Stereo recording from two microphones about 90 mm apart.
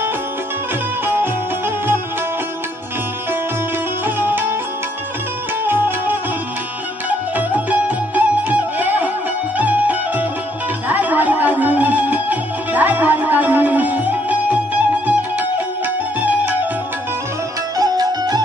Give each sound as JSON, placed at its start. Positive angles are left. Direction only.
{"t": 1.0, "sound": "music", "side_deg": -25}
{"t": 4.0, "sound": "music", "side_deg": -25}
{"t": 5.7, "sound": "music", "side_deg": -20}
{"t": 7.3, "sound": "music", "side_deg": -20}
{"t": 17.7, "sound": "music", "side_deg": -45}